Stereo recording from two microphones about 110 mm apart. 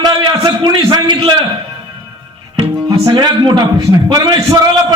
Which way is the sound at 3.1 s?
40° right (ahead or behind).